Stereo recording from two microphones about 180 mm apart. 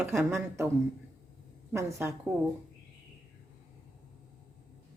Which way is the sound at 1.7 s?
15° right (ahead or behind).